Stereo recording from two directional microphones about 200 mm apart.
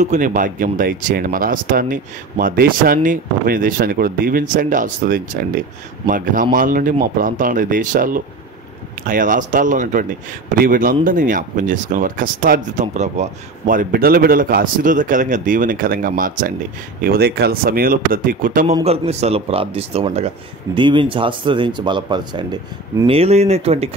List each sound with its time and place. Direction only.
0.0 s speech: 40° right (ahead or behind)
18.8 s speech: 30° right (ahead or behind)